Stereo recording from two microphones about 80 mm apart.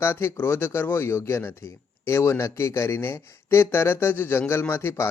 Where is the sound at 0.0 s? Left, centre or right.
Left.